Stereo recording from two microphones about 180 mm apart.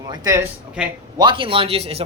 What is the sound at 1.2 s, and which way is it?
Speech, 25° right (ahead or behind).